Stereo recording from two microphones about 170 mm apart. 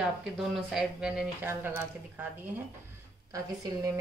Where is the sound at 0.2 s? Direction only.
Centre (ahead or behind).